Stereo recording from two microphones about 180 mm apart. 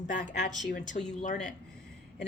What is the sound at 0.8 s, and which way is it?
Speech, 40° left (ahead or behind).